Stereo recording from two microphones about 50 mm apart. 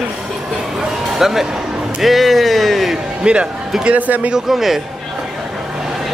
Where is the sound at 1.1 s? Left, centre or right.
Centre.